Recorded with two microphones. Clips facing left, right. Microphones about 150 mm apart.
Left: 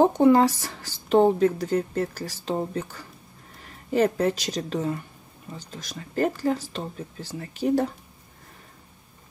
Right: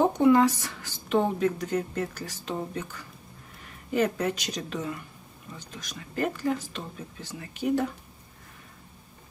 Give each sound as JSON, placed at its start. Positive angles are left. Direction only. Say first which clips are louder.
{"t": 0.0, "sound": "speech", "louder": "left 3 dB", "side_deg": 35}